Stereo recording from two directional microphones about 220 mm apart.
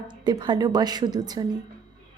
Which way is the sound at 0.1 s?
20° right (ahead or behind).